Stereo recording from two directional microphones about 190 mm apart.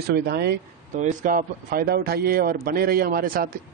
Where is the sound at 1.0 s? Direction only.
40° right (ahead or behind).